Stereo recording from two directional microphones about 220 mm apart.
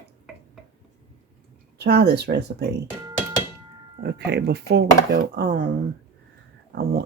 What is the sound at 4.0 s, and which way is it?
Speech, 50° right (ahead or behind).